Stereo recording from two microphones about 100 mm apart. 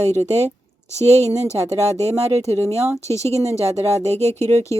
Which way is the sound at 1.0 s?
90° right.